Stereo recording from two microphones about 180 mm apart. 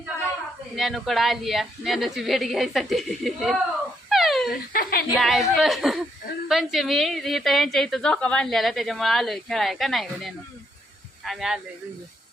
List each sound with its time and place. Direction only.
0.8 s a woman's voice: centre (ahead or behind)
4.1 s a sound: centre (ahead or behind)
4.7 s a woman's voice: 55° left (ahead or behind)
5.1 s a woman's voice: centre (ahead or behind)